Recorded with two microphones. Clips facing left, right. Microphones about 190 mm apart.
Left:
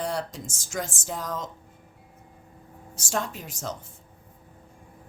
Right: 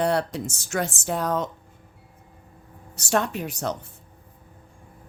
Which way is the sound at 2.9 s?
65° right (ahead or behind).